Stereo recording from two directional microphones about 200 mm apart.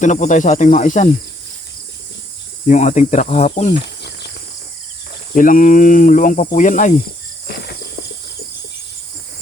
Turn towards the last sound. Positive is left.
turn(degrees=55)  # may be behind; listen again after turning